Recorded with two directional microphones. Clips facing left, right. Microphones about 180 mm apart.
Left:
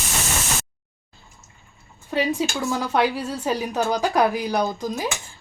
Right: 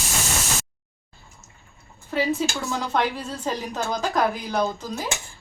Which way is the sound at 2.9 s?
10° left (ahead or behind).